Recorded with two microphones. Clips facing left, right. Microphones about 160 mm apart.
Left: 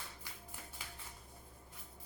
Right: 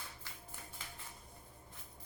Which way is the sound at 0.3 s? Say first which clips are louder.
Even; 15° left (ahead or behind).